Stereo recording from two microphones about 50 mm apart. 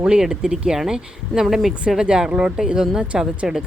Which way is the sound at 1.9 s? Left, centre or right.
Centre.